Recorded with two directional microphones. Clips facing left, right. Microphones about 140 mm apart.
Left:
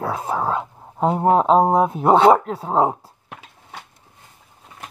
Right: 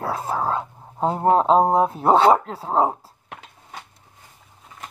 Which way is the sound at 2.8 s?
5° left (ahead or behind).